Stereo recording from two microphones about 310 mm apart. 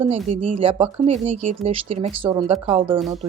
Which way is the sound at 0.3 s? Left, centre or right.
Right.